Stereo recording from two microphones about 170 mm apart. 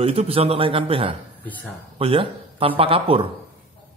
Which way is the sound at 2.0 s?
30° right (ahead or behind).